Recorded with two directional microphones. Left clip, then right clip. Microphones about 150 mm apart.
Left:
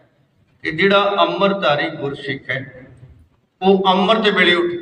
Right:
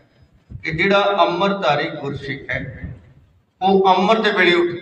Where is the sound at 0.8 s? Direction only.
25° left (ahead or behind).